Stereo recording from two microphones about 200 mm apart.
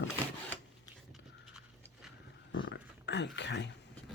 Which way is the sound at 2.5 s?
65° left (ahead or behind).